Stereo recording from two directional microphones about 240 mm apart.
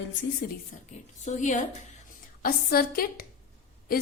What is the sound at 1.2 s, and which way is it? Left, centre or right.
Speech, left.